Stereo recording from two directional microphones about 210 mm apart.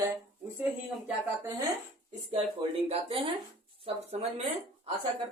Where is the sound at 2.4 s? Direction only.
30° right (ahead or behind).